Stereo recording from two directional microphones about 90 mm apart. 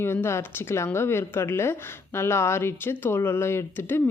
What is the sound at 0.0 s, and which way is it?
A woman's voice, 25° left (ahead or behind).